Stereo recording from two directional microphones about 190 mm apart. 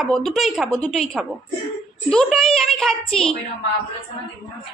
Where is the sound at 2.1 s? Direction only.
5° left (ahead or behind).